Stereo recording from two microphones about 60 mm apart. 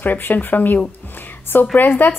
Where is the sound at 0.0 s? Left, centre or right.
Left.